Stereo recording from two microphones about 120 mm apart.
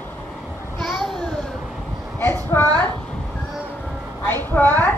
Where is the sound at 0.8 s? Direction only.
5° left (ahead or behind).